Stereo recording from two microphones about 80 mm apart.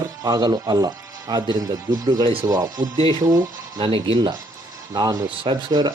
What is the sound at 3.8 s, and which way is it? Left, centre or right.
Speech, right.